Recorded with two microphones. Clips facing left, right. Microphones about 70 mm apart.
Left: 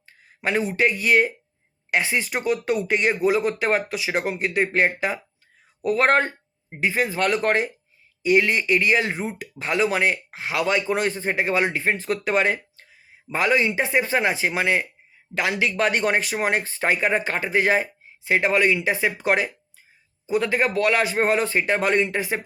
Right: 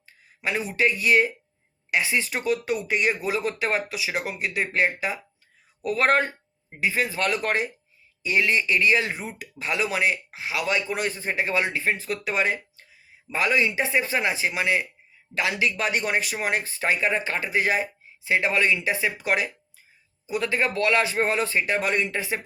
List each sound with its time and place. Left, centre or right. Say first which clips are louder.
0.0 s a sound: left 3 dB; left
0.7 s speech: right 1 dB; left
2.6 s speech: left 3 dB; left
3.1 s speech: left 5 dB; left
11.9 s speech: left 4 dB; left
13.3 s speech: left 2 dB; left
15.7 s speech: left 4 dB; left
18.3 s speech: left 3 dB; left